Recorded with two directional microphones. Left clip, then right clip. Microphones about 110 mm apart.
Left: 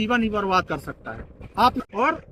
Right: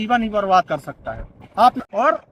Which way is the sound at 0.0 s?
35° right (ahead or behind).